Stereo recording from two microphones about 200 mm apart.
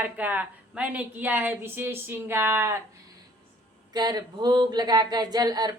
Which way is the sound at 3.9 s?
20° right (ahead or behind).